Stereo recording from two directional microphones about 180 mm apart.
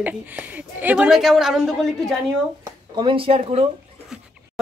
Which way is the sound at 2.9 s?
30° right (ahead or behind).